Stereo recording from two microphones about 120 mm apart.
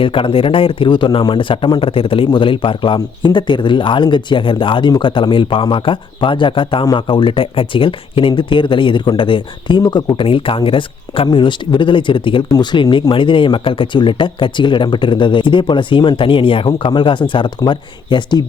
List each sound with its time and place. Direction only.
0.0 s speech: 45° left (ahead or behind)